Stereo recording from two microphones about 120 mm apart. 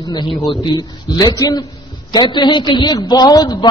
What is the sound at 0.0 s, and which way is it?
A man's voice, 35° left (ahead or behind).